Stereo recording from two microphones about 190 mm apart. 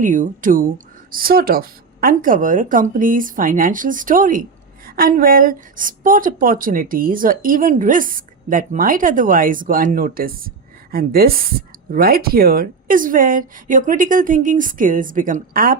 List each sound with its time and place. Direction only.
0.0 s speech: 45° right (ahead or behind)